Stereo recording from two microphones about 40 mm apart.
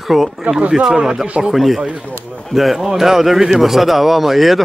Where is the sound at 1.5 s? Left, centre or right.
Centre.